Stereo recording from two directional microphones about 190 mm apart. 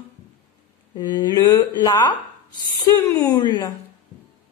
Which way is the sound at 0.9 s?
20° left (ahead or behind).